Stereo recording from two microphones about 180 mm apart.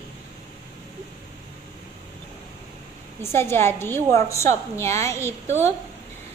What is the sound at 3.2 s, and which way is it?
A woman's voice, 15° left (ahead or behind).